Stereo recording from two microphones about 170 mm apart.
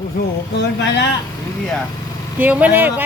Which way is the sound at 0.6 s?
90° left.